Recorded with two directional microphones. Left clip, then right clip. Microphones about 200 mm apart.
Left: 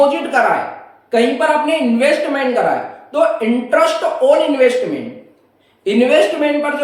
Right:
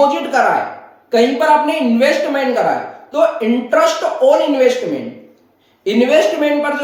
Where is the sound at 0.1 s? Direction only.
5° left (ahead or behind).